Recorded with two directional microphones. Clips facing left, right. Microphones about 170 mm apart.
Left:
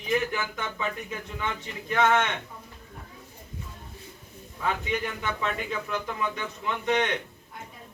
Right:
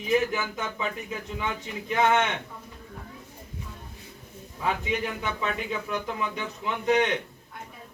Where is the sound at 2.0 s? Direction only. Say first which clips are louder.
Right 1 dB; 20° right (ahead or behind).